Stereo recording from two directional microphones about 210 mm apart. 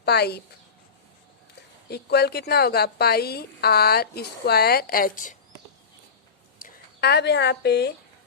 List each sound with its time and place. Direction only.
0.0 s speech: 50° left (ahead or behind)
1.9 s a woman's voice: 50° left (ahead or behind)
6.6 s speech: 50° left (ahead or behind)